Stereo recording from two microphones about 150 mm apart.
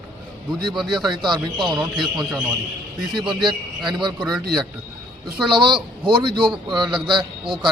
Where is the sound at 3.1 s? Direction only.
30° right (ahead or behind).